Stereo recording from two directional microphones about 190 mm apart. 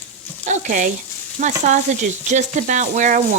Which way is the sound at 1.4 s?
40° right (ahead or behind).